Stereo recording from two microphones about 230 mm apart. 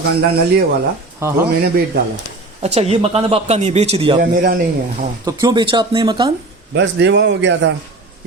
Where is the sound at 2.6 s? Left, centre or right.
Right.